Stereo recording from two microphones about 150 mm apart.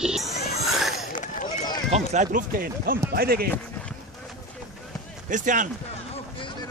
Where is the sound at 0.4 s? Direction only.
45° left (ahead or behind).